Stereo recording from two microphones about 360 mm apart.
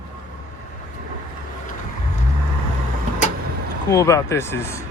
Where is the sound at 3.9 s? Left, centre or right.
Centre.